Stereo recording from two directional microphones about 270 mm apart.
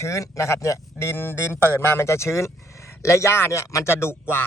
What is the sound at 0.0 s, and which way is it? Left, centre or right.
Speech, centre.